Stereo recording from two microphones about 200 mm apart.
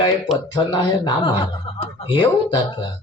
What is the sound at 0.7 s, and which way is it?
A man's voice, 25° left (ahead or behind).